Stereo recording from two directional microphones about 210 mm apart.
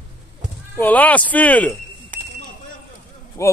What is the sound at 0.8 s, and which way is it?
Speech, 5° left (ahead or behind).